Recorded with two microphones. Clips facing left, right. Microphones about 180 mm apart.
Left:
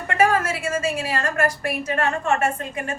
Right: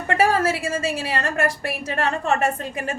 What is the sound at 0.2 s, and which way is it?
A woman's voice, 30° right (ahead or behind).